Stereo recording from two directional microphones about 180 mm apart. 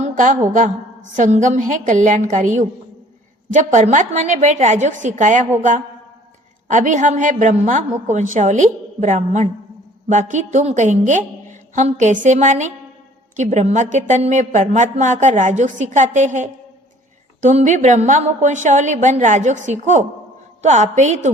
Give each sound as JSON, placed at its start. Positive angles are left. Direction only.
{"t": 0.0, "sound": "a sound", "side_deg": -45}
{"t": 1.1, "sound": "a woman's voice", "side_deg": -45}
{"t": 6.7, "sound": "a woman's voice", "side_deg": -45}